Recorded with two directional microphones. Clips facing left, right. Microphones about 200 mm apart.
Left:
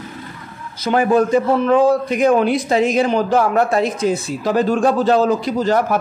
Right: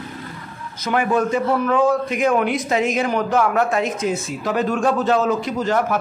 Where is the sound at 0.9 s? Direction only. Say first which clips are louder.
Left 5 dB; 35° left (ahead or behind).